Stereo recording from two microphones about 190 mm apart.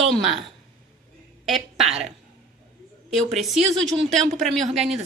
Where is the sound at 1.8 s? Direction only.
35° right (ahead or behind).